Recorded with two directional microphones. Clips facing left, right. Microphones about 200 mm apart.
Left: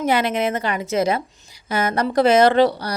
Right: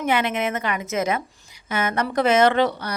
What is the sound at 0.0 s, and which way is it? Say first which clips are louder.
Speech: left 3 dB; 35° left (ahead or behind).